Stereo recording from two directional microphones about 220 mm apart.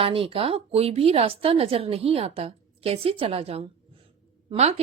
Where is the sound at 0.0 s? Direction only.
25° right (ahead or behind).